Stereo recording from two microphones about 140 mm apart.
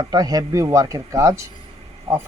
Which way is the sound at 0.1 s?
25° right (ahead or behind).